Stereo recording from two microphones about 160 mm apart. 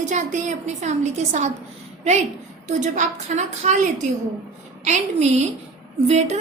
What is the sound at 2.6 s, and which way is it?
A woman's voice, 50° right (ahead or behind).